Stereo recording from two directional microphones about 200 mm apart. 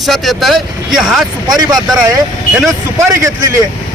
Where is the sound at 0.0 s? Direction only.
Centre (ahead or behind).